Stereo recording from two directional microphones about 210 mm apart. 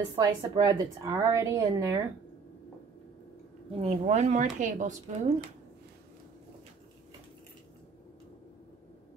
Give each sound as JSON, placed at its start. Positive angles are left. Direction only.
{"t": 0.1, "sound": "a woman's voice", "side_deg": -20}
{"t": 3.8, "sound": "speech", "side_deg": -30}